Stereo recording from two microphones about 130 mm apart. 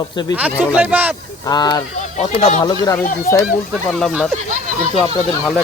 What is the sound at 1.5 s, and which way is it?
Speech, 30° left (ahead or behind).